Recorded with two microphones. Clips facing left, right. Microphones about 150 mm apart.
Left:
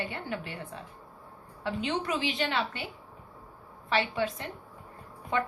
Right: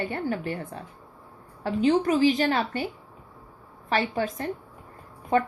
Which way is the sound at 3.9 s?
45° right (ahead or behind).